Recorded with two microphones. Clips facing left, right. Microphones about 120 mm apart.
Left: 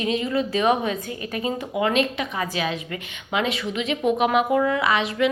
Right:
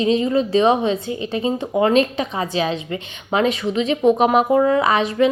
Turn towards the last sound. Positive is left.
turn(degrees=-40)  # may be behind; listen again after turning